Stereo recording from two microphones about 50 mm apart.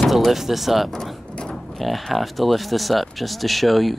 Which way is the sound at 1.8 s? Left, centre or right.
Centre.